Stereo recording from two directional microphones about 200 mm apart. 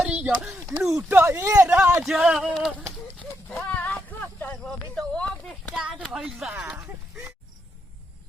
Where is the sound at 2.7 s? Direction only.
10° right (ahead or behind).